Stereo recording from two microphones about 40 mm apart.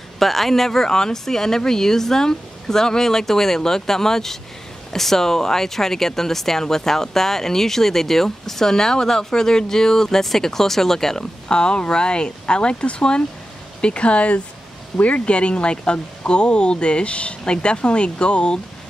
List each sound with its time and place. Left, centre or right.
0.2 s speech: centre
11.4 s speech: left